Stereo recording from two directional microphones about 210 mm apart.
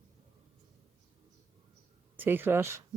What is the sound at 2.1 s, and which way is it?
Speech, 10° right (ahead or behind).